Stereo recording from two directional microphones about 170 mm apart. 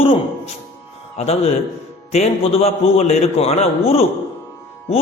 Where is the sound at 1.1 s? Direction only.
40° left (ahead or behind).